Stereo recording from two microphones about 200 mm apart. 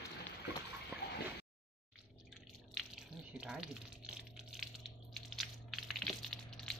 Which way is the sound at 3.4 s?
5° right (ahead or behind).